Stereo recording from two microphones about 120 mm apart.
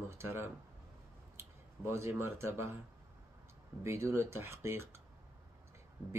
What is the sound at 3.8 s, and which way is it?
Speech, 25° right (ahead or behind).